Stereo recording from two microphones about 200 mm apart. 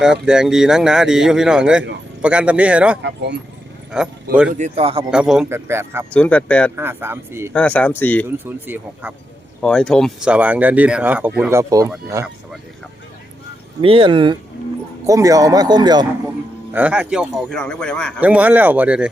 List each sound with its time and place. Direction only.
0.0 s speech: 5° right (ahead or behind)
3.0 s speech: 60° right (ahead or behind)
3.9 s speech: 5° right (ahead or behind)
4.5 s speech: 35° right (ahead or behind)
5.1 s speech: 5° right (ahead or behind)
6.1 s speech: 5° left (ahead or behind)
6.7 s speech: 10° right (ahead or behind)
7.5 s speech: 5° left (ahead or behind)
8.4 s speech: 10° right (ahead or behind)
9.6 s speech: 5° left (ahead or behind)
13.8 s speech: 25° right (ahead or behind)
16.7 s speech: 5° right (ahead or behind)
18.2 s speech: 10° right (ahead or behind)